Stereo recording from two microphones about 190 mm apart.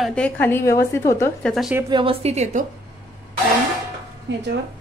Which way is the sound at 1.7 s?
20° right (ahead or behind).